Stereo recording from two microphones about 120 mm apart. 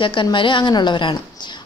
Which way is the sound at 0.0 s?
40° left (ahead or behind).